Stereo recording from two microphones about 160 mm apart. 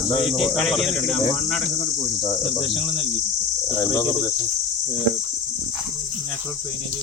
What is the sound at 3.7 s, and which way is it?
Cricket, 20° left (ahead or behind).